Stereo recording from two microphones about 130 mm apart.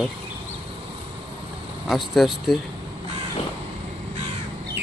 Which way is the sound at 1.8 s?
Centre (ahead or behind).